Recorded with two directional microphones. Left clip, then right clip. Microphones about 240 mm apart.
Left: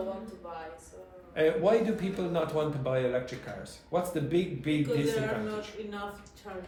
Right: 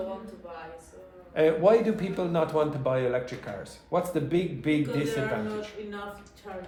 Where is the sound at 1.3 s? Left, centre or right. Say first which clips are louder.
Right 4 dB; right.